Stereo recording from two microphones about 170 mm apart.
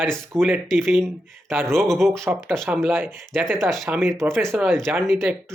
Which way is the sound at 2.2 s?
15° right (ahead or behind).